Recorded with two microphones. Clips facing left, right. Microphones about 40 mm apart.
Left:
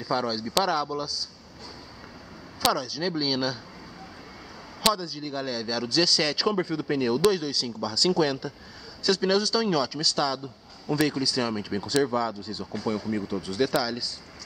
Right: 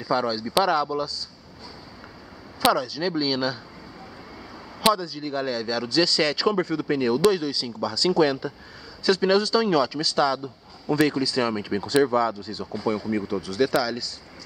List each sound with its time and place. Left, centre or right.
0.0 s speech: centre
2.6 s speech: centre
4.8 s speech: centre